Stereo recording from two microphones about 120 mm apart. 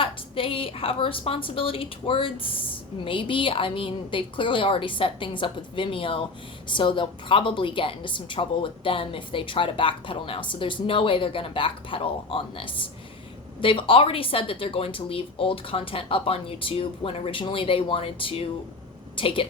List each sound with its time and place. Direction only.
0.0 s a woman's voice: 50° left (ahead or behind)